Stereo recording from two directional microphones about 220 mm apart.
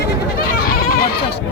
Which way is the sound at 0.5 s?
40° left (ahead or behind).